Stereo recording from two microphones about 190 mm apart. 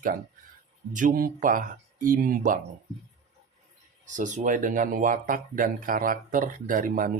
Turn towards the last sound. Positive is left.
turn(degrees=-45)  # may be behind; listen again after turning